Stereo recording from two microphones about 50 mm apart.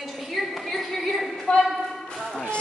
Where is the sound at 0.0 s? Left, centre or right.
Centre.